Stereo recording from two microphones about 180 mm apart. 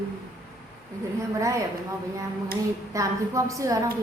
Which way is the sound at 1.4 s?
15° right (ahead or behind).